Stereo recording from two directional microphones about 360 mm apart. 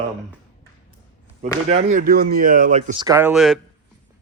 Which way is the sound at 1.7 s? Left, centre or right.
Centre.